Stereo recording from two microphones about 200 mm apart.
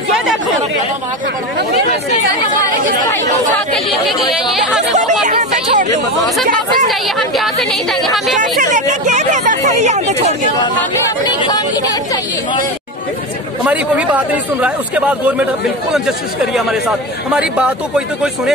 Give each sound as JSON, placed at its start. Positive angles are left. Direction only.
{"t": 3.7, "sound": "speech", "side_deg": 0}
{"t": 5.2, "sound": "a sound", "side_deg": -40}
{"t": 6.4, "sound": "speech", "side_deg": -40}
{"t": 6.9, "sound": "speech", "side_deg": 0}
{"t": 8.4, "sound": "a sound", "side_deg": -40}
{"t": 11.2, "sound": "speech", "side_deg": 20}
{"t": 13.7, "sound": "a man's voice", "side_deg": -5}
{"t": 17.3, "sound": "speech", "side_deg": -5}